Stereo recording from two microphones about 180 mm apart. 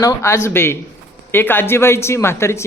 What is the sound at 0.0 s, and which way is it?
A man's voice, 20° left (ahead or behind).